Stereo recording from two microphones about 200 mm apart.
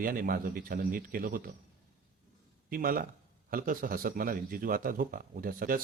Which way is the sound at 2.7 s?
45° right (ahead or behind).